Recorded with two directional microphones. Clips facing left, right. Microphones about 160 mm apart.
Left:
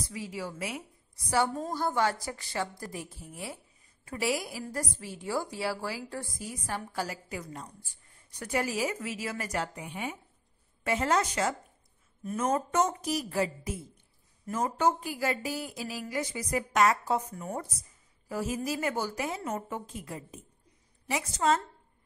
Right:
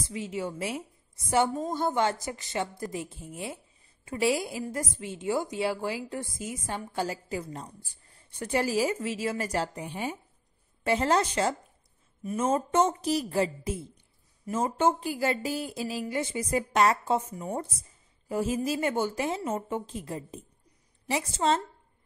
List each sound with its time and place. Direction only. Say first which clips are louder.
0.1 s a woman's voice: right 7 dB; 25° right (ahead or behind)